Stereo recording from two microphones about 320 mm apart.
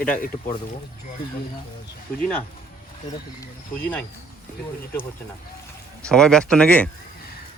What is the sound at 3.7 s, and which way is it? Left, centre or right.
Speech, centre.